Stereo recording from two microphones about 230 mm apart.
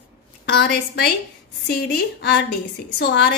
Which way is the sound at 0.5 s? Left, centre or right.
Left.